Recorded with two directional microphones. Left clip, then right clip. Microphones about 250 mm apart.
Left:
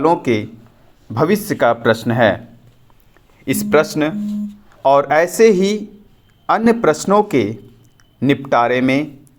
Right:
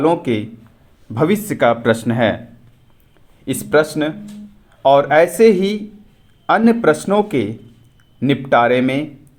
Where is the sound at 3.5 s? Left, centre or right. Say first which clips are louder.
Left 1 dB; centre.